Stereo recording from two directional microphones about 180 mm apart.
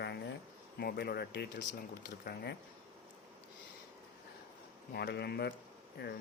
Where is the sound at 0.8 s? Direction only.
60° left (ahead or behind).